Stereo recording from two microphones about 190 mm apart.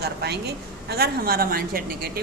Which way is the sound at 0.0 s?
60° right (ahead or behind).